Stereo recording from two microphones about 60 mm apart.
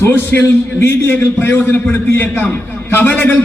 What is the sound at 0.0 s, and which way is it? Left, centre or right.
A man's voice, left.